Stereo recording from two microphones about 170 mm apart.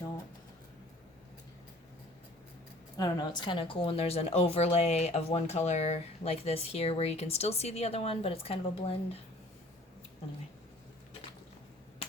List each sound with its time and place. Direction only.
3.0 s speech: 25° left (ahead or behind)